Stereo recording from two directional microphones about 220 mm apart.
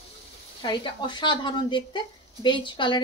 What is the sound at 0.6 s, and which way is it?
A woman's voice, 20° left (ahead or behind).